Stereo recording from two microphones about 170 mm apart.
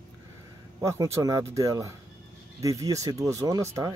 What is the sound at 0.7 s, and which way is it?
Speech, 15° right (ahead or behind).